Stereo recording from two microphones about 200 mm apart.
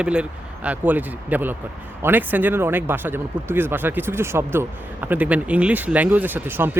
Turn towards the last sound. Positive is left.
turn(degrees=-10)  # may be behind; listen again after turning